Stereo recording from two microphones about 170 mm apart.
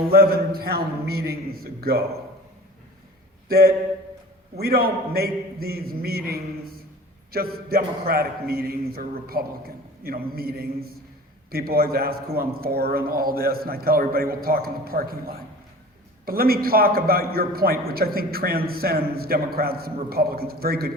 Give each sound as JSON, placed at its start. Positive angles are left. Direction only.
{"t": 0.1, "sound": "a man's voice", "side_deg": -65}
{"t": 3.5, "sound": "a man's voice", "side_deg": -65}